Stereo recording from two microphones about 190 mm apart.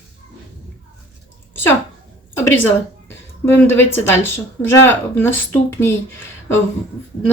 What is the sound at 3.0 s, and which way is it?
Speech, 10° left (ahead or behind).